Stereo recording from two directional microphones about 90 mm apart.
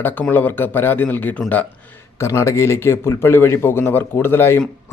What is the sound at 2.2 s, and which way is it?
Speech, 35° left (ahead or behind).